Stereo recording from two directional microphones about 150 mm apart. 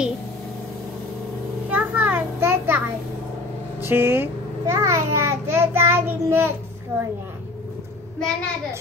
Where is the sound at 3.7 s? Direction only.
15° right (ahead or behind).